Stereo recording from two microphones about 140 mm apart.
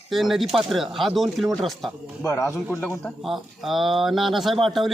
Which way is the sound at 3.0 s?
Centre (ahead or behind).